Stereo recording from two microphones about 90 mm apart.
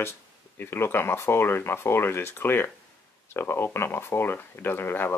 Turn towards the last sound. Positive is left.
turn(degrees=25)  # may be behind; listen again after turning